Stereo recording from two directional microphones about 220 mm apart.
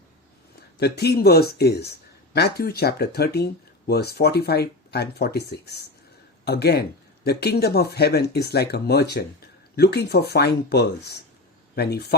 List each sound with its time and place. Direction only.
0.8 s speech: 50° left (ahead or behind)